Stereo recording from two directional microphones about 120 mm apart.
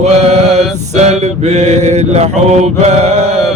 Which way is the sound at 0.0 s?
60° right (ahead or behind).